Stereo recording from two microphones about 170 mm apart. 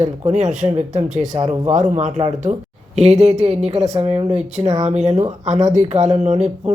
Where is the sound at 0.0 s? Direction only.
45° right (ahead or behind).